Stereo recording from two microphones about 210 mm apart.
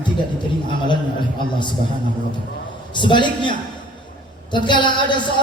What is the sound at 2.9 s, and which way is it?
Music, 20° left (ahead or behind).